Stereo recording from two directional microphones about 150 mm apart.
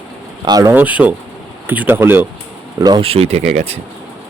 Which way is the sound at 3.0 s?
40° right (ahead or behind).